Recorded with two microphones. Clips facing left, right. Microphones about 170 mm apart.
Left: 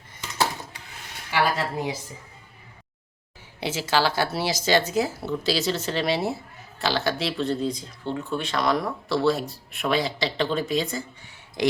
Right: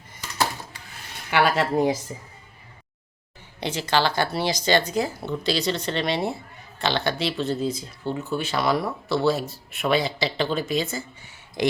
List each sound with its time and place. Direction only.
0.2 s dishes: 25° left (ahead or behind)
1.3 s speech: 75° right (ahead or behind)
1.7 s speech: 50° right (ahead or behind)
3.6 s speech: 5° left (ahead or behind)